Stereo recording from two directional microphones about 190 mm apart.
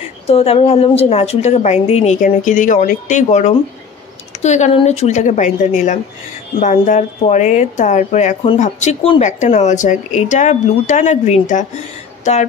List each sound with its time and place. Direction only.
0.3 s a woman's voice: 30° left (ahead or behind)